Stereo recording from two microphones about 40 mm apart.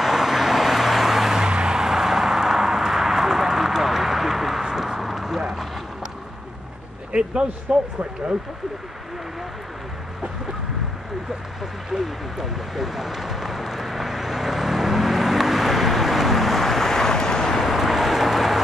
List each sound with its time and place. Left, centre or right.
0.0 s vehicle: centre
1.4 s vehicle: centre
7.1 s a sound: right
7.7 s speech: right
11.6 s vehicle: centre
17.6 s vehicle: centre